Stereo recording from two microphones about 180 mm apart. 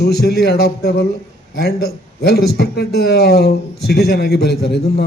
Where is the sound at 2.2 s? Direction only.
65° left (ahead or behind).